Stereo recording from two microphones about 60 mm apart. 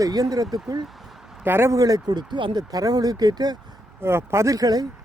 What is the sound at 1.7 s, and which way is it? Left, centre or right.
Speech, right.